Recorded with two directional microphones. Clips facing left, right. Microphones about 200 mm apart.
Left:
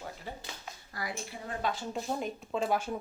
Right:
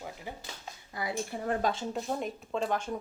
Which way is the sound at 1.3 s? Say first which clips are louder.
Right 7 dB; 50° right (ahead or behind).